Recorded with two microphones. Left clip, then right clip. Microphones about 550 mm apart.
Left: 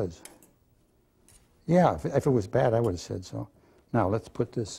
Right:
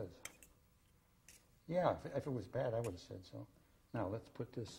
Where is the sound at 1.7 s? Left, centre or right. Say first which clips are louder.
Left 14 dB; left.